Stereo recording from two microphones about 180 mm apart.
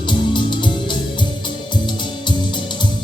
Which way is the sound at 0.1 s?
25° left (ahead or behind).